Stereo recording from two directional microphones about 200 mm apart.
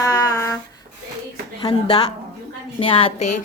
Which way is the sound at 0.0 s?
20° left (ahead or behind).